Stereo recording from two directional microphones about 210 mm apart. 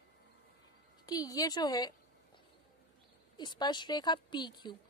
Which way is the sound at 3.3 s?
20° left (ahead or behind).